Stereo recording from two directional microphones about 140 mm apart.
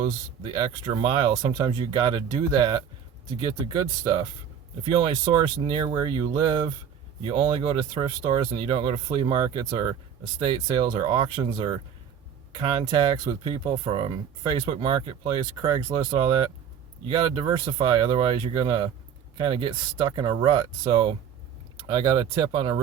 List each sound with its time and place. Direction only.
0.0 s speech: 35° right (ahead or behind)